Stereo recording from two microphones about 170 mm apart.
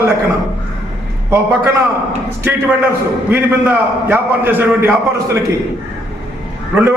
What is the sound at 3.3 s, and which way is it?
A man's voice, 10° right (ahead or behind).